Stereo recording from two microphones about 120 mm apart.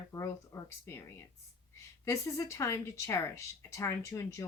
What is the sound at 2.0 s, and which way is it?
Speech, 25° left (ahead or behind).